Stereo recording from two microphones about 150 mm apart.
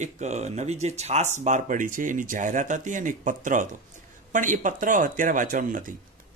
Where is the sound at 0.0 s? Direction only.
50° right (ahead or behind).